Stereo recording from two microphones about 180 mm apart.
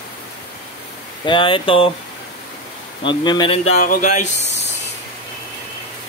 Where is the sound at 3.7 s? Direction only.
45° left (ahead or behind).